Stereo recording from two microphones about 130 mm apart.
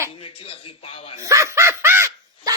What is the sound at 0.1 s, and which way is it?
A man's voice, 45° left (ahead or behind).